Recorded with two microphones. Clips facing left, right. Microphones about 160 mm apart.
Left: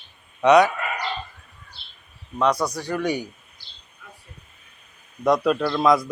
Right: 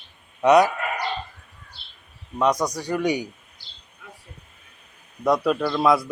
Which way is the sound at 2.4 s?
15° right (ahead or behind).